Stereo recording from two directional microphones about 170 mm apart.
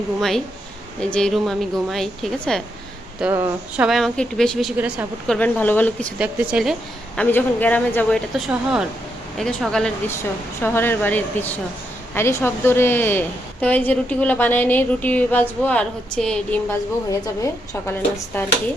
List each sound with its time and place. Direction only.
0.2 s a woman's voice: centre (ahead or behind)
3.2 s speech: 10° right (ahead or behind)
3.8 s a woman's voice: centre (ahead or behind)
5.3 s a woman's voice: 10° left (ahead or behind)
6.1 s speech: 5° right (ahead or behind)
7.2 s a woman's voice: 10° left (ahead or behind)
8.4 s a woman's voice: 5° right (ahead or behind)
17.1 s a woman's voice: 20° left (ahead or behind)